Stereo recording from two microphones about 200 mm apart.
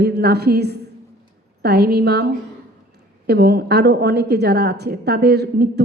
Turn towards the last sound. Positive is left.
turn(degrees=-55)  # may be behind; listen again after turning